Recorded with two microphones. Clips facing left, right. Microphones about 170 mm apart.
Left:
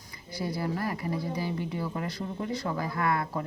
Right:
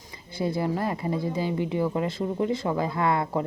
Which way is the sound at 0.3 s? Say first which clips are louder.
Right 5 dB; 25° right (ahead or behind).